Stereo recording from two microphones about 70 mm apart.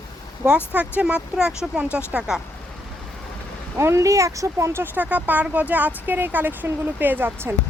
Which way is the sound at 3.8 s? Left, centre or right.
Right.